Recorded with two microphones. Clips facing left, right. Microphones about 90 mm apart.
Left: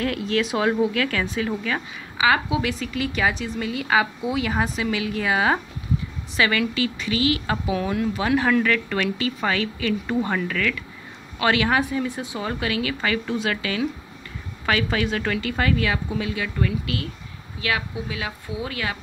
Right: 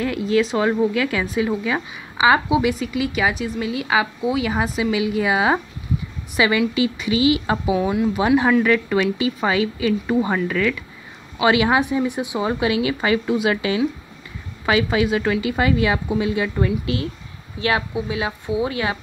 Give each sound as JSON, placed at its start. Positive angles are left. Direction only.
{"t": 0.0, "sound": "speech", "side_deg": -5}
{"t": 2.7, "sound": "speech", "side_deg": -5}